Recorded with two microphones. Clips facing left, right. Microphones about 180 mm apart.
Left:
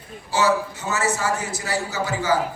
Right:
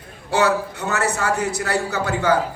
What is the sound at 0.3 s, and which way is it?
A man's voice, 60° right (ahead or behind).